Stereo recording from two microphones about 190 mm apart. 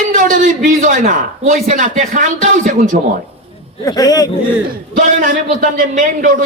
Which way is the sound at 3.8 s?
20° left (ahead or behind).